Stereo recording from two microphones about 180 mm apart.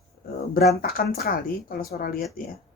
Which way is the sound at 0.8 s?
55° left (ahead or behind).